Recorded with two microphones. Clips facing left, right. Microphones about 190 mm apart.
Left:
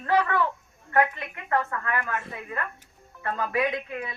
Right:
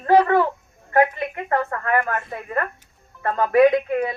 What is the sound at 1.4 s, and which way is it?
A woman's voice, 45° right (ahead or behind).